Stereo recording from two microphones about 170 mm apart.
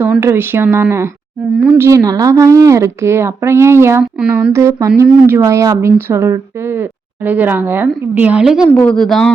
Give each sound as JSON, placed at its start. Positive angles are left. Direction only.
{"t": 0.0, "sound": "a woman's voice", "side_deg": -15}
{"t": 1.9, "sound": "a woman's voice", "side_deg": -20}
{"t": 4.5, "sound": "a woman's voice", "side_deg": -15}
{"t": 8.7, "sound": "speech", "side_deg": 5}